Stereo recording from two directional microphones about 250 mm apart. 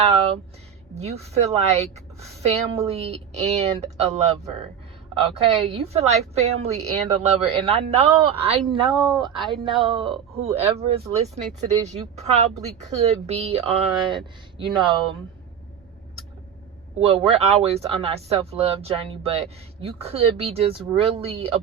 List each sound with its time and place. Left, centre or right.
0.0 s a sound: right
0.9 s speech: right
8.9 s speech: centre
9.5 s speech: centre
12.1 s speech: right
17.0 s speech: right